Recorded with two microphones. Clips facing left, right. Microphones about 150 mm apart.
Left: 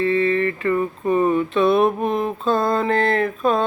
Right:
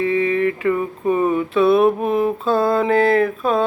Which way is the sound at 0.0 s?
10° right (ahead or behind).